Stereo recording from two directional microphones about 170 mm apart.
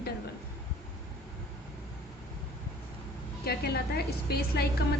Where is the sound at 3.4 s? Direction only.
65° left (ahead or behind).